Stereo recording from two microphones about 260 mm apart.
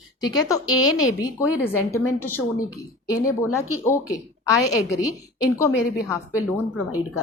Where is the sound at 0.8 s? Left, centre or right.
Left.